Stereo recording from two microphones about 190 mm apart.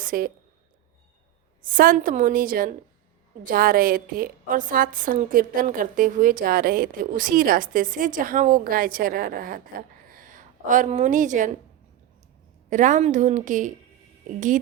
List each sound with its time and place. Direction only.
0.0 s a woman's voice: 45° right (ahead or behind)
1.6 s a woman's voice: 45° right (ahead or behind)
10.1 s a sound: 45° right (ahead or behind)
12.7 s a woman's voice: 40° right (ahead or behind)